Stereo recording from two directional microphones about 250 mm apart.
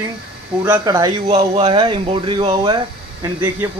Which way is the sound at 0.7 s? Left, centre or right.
Centre.